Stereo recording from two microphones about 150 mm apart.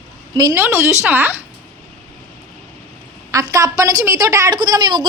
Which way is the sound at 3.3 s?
20° right (ahead or behind).